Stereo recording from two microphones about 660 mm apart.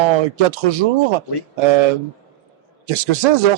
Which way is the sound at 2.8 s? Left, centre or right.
Right.